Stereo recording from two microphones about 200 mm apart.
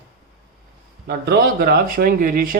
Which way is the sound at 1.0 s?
50° right (ahead or behind).